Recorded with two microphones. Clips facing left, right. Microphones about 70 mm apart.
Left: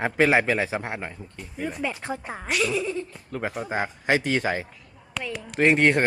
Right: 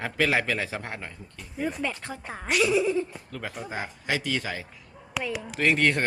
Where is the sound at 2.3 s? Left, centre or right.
Centre.